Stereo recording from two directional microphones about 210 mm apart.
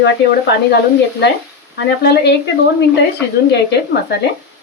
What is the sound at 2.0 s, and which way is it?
Speech, 50° left (ahead or behind).